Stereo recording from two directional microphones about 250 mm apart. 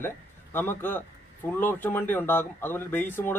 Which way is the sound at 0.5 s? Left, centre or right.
Centre.